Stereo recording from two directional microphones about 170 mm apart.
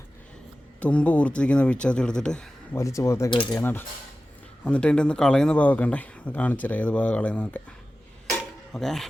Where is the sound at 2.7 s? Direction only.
15° left (ahead or behind).